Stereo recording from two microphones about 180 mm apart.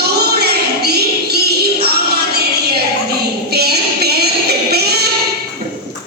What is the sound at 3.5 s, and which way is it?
Music, 60° right (ahead or behind).